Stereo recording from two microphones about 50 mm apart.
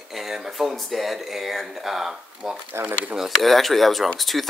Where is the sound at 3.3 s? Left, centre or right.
Centre.